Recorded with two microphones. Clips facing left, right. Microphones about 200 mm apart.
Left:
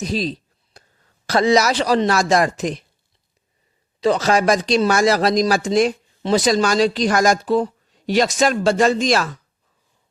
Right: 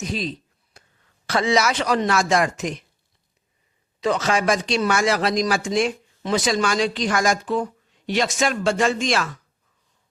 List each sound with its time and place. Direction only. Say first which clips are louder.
0.0 s a sound: left 4 dB; 35° left (ahead or behind)
1.3 s speech: left 4 dB; 40° left (ahead or behind)
4.0 s speech: left 4 dB; 35° left (ahead or behind)